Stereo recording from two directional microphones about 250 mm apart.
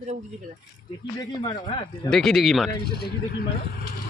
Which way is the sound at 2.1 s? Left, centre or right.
Centre.